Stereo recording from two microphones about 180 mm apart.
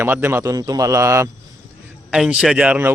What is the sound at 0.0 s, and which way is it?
Speech, 15° right (ahead or behind).